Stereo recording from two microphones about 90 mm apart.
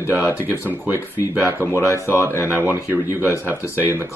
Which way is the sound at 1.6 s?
25° left (ahead or behind).